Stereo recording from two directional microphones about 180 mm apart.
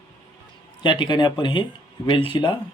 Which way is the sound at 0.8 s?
25° left (ahead or behind).